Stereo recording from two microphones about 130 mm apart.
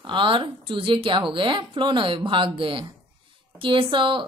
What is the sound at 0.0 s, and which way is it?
Speech, 40° right (ahead or behind).